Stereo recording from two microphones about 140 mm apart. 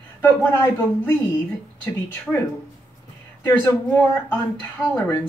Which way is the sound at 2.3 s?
Centre (ahead or behind).